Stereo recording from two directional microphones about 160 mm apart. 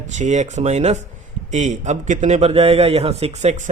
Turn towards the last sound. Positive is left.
turn(degrees=-45)  # may be behind; listen again after turning